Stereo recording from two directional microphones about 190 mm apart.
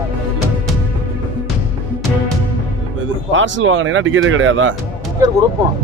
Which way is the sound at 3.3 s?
80° right.